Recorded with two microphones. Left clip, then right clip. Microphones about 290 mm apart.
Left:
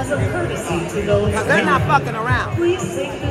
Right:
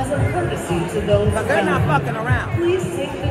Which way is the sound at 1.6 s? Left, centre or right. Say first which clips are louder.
Left 3 dB; centre.